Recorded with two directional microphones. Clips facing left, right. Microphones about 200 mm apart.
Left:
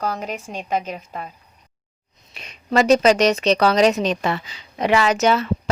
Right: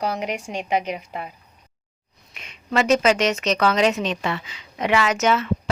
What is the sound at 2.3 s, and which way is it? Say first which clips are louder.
A woman's voice: left 4 dB; 35° left (ahead or behind).